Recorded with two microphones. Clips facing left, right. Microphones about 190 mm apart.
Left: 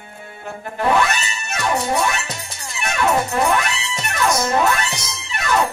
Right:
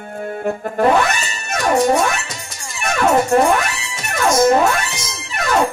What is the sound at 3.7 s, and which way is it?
Music, 55° right (ahead or behind).